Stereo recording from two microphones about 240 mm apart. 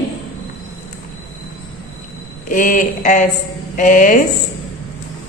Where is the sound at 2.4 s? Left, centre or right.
Left.